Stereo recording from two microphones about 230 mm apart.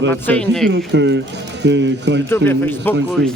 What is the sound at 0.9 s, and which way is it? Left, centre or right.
Speech, right.